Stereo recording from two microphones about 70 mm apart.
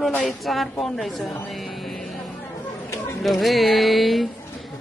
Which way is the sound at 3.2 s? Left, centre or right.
Centre.